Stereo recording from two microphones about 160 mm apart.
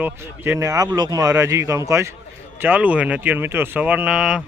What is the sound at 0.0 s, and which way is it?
A man's voice, 15° right (ahead or behind).